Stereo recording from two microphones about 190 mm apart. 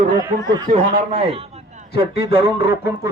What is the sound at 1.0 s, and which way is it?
Speech, 30° right (ahead or behind).